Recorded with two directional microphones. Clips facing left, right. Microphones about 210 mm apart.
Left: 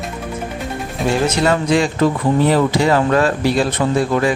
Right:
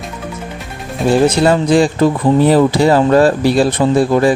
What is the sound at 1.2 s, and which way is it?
Speech, 30° right (ahead or behind).